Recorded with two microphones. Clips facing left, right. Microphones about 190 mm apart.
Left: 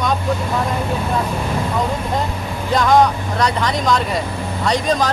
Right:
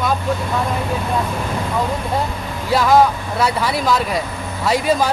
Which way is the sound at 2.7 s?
5° right (ahead or behind).